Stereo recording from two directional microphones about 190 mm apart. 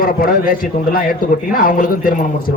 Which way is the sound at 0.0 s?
50° left (ahead or behind).